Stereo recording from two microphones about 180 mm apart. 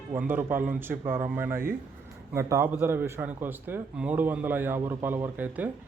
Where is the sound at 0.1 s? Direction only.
10° right (ahead or behind).